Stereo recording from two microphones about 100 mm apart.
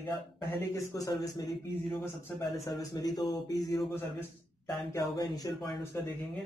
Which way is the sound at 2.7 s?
40° left (ahead or behind).